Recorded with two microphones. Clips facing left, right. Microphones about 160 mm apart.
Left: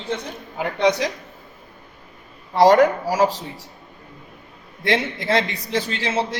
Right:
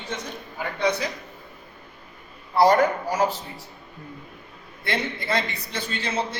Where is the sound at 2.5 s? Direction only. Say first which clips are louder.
Left 4 dB; 90° left.